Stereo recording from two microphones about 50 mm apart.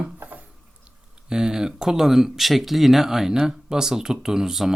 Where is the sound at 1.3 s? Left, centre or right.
Centre.